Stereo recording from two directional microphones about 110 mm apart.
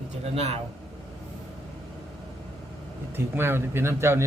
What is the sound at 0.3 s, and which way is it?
Speech, 75° right (ahead or behind).